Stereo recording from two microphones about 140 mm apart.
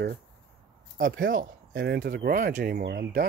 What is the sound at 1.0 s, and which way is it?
Speech, 90° right.